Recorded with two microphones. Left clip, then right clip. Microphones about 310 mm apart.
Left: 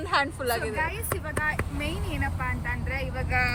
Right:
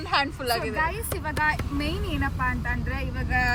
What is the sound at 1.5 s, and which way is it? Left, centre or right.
Speech, centre.